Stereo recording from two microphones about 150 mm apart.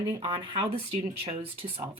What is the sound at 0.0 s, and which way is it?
Speech, 25° right (ahead or behind).